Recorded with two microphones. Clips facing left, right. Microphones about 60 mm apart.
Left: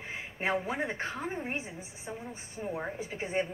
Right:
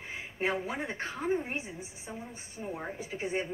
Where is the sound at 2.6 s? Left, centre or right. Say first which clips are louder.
Left 2 dB; left.